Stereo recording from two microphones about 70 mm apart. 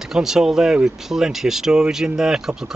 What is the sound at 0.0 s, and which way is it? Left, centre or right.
Speech, centre.